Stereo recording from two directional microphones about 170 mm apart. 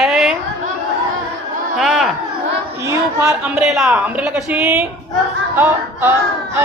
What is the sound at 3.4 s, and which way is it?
A woman's voice, 5° right (ahead or behind).